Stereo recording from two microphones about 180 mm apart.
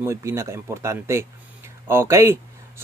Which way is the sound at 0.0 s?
15° right (ahead or behind).